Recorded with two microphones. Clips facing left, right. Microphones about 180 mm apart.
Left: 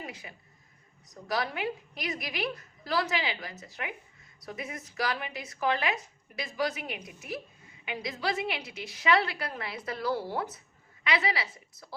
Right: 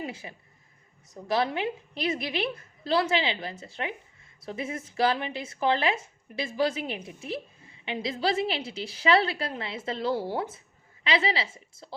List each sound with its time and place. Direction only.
0.0 s speech: 25° right (ahead or behind)